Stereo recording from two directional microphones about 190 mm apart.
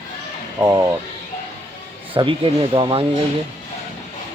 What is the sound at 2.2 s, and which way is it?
Speech, 25° right (ahead or behind).